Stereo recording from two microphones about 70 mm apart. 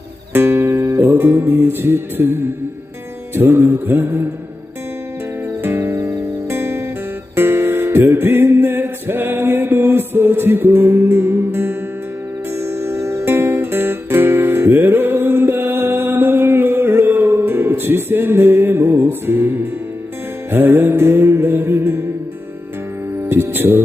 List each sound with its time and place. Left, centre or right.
0.3 s music: right
5.6 s music: right
23.3 s music: right